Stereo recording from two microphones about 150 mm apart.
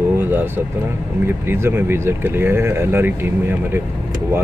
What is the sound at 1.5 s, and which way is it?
Speech, 15° right (ahead or behind).